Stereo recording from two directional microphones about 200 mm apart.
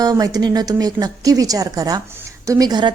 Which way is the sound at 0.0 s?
20° right (ahead or behind).